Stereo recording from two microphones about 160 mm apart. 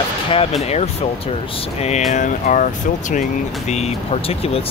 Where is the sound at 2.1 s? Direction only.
50° left (ahead or behind).